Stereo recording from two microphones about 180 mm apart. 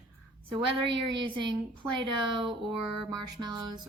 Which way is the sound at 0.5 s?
30° right (ahead or behind).